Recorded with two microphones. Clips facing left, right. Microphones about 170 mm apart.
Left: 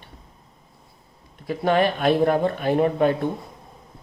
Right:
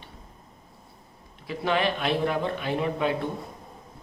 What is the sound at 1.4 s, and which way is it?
Speech, 45° left (ahead or behind).